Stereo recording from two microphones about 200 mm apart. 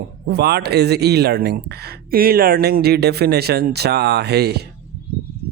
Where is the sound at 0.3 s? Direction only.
55° right (ahead or behind).